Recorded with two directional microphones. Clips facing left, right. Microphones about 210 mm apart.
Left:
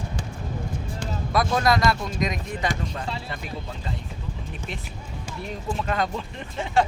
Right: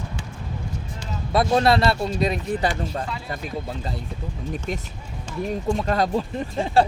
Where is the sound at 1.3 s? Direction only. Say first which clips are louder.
Right 4 dB; 30° right (ahead or behind).